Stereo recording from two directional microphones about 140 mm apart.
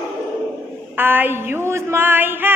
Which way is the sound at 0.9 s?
15° right (ahead or behind).